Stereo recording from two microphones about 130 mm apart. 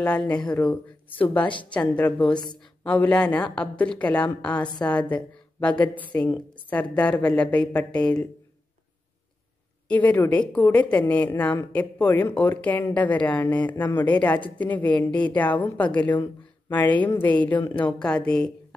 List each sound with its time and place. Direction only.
0.0 s a woman's voice: 10° left (ahead or behind)
2.3 s speech: 35° left (ahead or behind)
2.8 s a woman's voice: 10° left (ahead or behind)
9.8 s a woman's voice: 10° left (ahead or behind)